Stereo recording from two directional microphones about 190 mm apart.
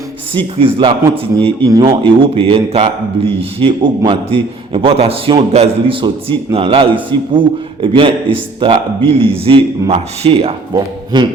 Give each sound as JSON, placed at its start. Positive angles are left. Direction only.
{"t": 0.3, "sound": "a man's voice", "side_deg": -25}